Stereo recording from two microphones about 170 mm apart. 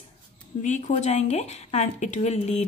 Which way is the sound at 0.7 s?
45° left (ahead or behind).